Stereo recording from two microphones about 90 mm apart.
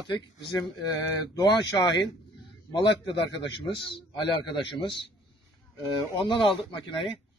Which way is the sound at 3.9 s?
60° left (ahead or behind).